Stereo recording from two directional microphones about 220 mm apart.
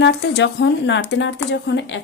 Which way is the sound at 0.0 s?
50° left (ahead or behind).